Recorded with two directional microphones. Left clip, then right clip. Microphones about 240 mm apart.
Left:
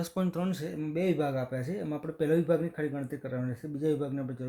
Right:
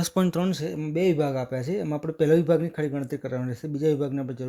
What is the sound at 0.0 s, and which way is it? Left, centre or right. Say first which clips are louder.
Speech: right 7 dB; right.